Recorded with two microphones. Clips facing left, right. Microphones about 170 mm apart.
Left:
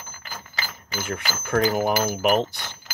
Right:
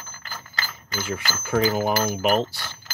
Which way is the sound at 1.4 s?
5° right (ahead or behind).